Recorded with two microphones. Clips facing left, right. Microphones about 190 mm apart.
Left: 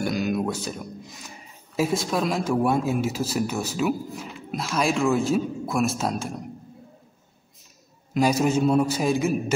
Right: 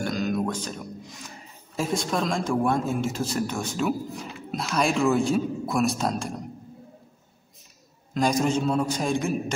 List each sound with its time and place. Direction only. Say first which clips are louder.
0.0 s music: left 2 dB; 10° left (ahead or behind)
1.8 s speech: left 2 dB; 5° left (ahead or behind)
8.1 s a man's voice: left 2 dB; 5° left (ahead or behind)